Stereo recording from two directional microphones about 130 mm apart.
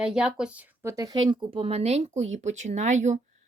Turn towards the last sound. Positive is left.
turn(degrees=-65)  # may be behind; listen again after turning